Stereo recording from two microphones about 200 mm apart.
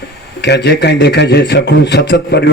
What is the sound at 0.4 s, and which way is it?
A man's voice, 55° left (ahead or behind).